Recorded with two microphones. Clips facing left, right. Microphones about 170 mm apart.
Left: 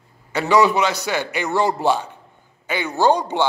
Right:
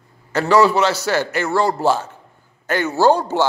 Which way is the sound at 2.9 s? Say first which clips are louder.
Right 2 dB; 5° right (ahead or behind).